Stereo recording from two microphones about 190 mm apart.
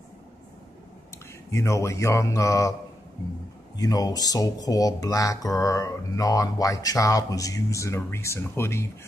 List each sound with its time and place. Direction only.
1.5 s speech: 15° left (ahead or behind)
3.7 s speech: 20° left (ahead or behind)